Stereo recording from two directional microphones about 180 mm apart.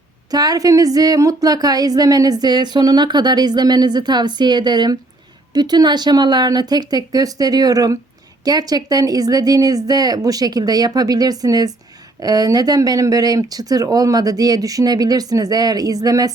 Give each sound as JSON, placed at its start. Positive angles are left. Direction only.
{"t": 0.3, "sound": "speech", "side_deg": -20}